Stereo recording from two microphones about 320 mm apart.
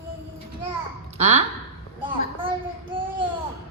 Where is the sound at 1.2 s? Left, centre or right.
Centre.